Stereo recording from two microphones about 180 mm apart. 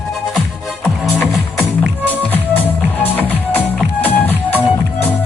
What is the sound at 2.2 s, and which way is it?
Music, 10° left (ahead or behind).